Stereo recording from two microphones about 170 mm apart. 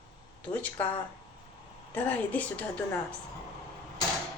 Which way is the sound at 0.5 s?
10° left (ahead or behind).